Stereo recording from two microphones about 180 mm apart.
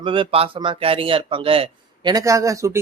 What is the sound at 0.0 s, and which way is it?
Speech, 30° right (ahead or behind).